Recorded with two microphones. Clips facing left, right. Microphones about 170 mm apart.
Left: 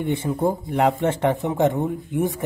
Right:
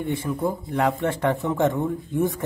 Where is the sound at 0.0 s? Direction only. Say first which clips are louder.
Left 3 dB; 25° left (ahead or behind).